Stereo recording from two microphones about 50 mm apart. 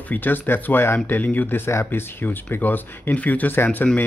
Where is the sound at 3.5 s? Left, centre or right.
Left.